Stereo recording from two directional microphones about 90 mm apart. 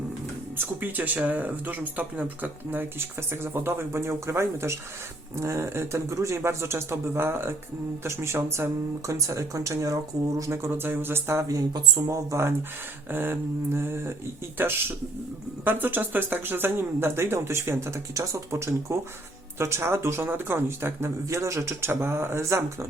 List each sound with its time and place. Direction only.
0.5 s speech: 20° right (ahead or behind)